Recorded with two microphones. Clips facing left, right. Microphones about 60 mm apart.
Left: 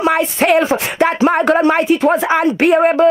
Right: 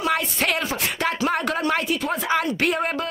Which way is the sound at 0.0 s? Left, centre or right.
Left.